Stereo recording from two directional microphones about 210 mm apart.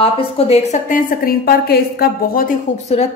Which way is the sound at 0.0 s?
30° left (ahead or behind).